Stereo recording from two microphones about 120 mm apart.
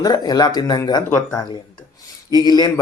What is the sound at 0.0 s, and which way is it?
Speech, 30° left (ahead or behind).